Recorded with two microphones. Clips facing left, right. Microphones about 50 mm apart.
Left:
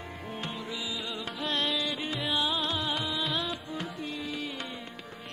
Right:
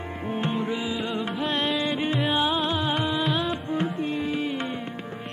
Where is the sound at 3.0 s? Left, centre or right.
Centre.